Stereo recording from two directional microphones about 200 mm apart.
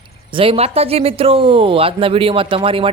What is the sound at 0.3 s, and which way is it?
Speech, 25° right (ahead or behind).